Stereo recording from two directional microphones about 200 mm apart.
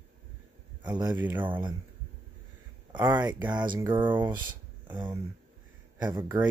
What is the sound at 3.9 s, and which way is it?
Speech, 25° right (ahead or behind).